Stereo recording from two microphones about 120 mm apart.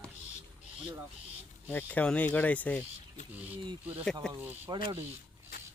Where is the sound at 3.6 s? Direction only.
40° right (ahead or behind).